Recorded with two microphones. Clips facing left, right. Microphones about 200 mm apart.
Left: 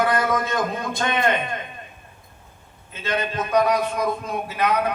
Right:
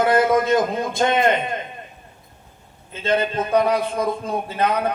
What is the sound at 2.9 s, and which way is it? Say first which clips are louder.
A man's voice: right 5 dB; 30° right (ahead or behind).